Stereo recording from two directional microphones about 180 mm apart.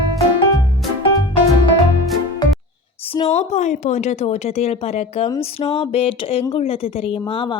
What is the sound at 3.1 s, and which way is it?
Speech, 35° left (ahead or behind).